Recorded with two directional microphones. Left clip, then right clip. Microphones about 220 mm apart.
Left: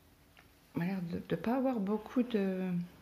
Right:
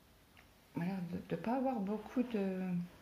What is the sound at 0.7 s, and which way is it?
Speech, 45° left (ahead or behind).